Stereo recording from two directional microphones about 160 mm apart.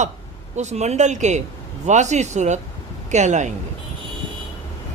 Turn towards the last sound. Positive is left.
turn(degrees=-45)  # may be behind; listen again after turning